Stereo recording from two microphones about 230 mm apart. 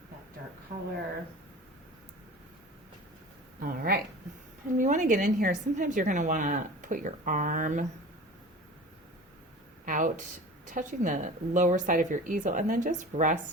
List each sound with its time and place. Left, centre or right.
3.6 s a woman's voice: right
9.8 s a woman's voice: right